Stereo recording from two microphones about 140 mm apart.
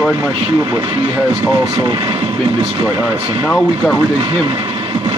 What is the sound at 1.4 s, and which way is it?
Speech, 30° right (ahead or behind).